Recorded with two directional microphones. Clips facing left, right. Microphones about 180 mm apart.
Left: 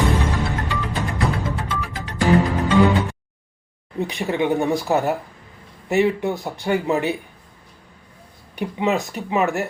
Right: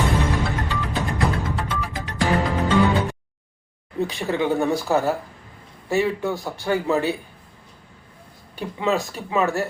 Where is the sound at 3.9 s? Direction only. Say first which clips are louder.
Left 1 dB; 15° left (ahead or behind).